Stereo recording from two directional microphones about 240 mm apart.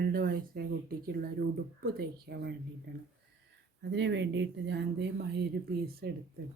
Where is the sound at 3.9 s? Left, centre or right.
Right.